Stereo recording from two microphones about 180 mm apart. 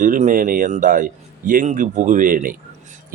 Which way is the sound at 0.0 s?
45° right (ahead or behind).